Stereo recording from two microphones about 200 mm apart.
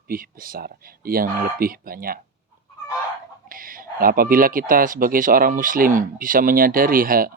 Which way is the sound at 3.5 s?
45° right (ahead or behind).